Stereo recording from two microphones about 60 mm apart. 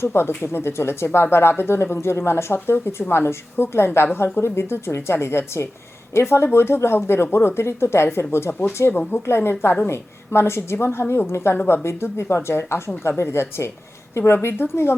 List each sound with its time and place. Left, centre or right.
0.0 s speech: left